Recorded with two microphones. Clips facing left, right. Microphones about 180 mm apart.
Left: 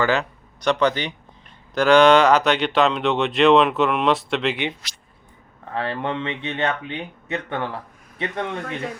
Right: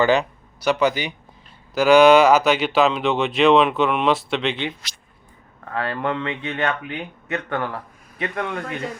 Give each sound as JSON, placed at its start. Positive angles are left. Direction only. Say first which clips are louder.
{"t": 0.0, "sound": "speech", "louder": "right 3 dB", "side_deg": -15}
{"t": 0.6, "sound": "speech", "louder": "even", "side_deg": -5}
{"t": 5.7, "sound": "speech", "louder": "right 1 dB", "side_deg": 25}